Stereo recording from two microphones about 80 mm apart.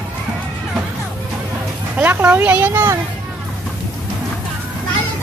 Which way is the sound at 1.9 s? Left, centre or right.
Right.